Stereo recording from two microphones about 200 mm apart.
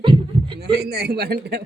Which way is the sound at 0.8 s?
55° right (ahead or behind).